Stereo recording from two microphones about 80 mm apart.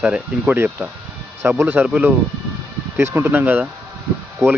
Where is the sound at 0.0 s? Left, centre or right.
Centre.